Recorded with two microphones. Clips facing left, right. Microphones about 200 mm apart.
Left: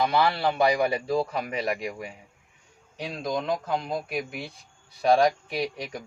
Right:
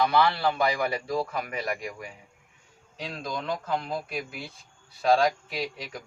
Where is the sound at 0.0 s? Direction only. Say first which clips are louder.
Even; 25° left (ahead or behind).